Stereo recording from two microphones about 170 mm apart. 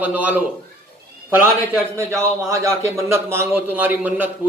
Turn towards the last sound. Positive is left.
turn(degrees=-10)  # may be behind; listen again after turning